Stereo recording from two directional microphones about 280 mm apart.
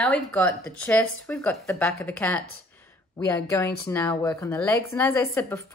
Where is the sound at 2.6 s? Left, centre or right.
Centre.